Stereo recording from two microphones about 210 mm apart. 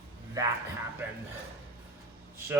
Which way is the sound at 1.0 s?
10° right (ahead or behind).